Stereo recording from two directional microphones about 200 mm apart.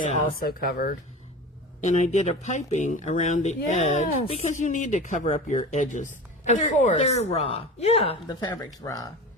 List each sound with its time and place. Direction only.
0.1 s speech: 40° left (ahead or behind)
1.8 s speech: 35° left (ahead or behind); by 9.0 s 15° left (ahead or behind)